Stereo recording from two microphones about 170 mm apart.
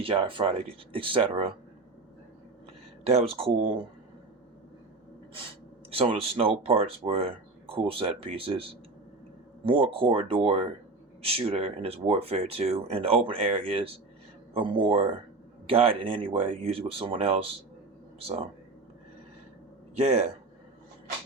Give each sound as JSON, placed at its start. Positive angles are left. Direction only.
{"t": 0.0, "sound": "speech", "side_deg": -30}
{"t": 3.1, "sound": "speech", "side_deg": -35}
{"t": 5.9, "sound": "speech", "side_deg": -35}
{"t": 9.6, "sound": "speech", "side_deg": -30}
{"t": 20.0, "sound": "speech", "side_deg": -40}